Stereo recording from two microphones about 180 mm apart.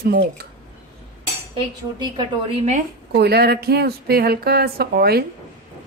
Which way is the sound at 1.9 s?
25° right (ahead or behind).